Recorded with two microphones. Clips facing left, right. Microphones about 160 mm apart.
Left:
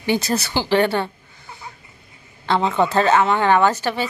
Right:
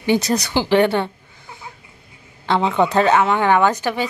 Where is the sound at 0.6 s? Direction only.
15° right (ahead or behind).